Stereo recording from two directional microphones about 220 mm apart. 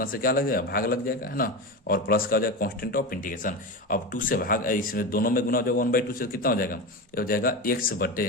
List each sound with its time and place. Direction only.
0.0 s speech: 40° left (ahead or behind)